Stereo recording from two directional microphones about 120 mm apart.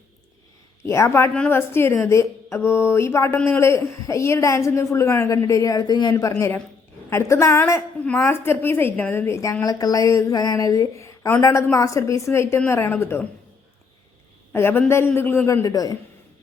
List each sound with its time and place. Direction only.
0.8 s a woman's voice: 20° left (ahead or behind)
14.5 s a woman's voice: 20° left (ahead or behind)
15.6 s speech: 30° left (ahead or behind)